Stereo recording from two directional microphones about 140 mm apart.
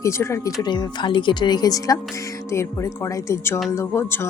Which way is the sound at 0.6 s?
30° left (ahead or behind).